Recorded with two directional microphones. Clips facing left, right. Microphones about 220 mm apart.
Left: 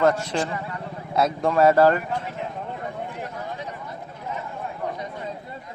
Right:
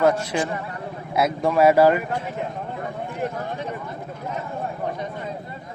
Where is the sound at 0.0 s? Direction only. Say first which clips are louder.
Right 1 dB; 10° right (ahead or behind).